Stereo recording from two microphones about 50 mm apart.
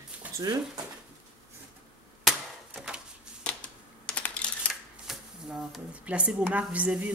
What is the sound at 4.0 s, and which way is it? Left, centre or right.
Coin, left.